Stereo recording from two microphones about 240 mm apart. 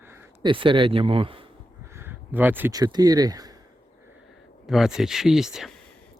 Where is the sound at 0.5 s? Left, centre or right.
Right.